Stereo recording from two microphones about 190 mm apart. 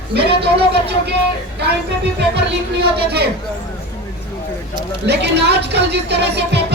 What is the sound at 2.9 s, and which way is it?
Speech, 60° right (ahead or behind).